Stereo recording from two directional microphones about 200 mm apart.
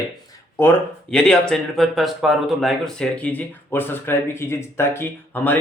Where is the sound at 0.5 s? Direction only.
10° left (ahead or behind).